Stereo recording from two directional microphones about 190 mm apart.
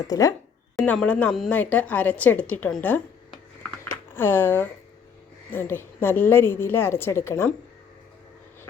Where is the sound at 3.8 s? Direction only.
15° left (ahead or behind).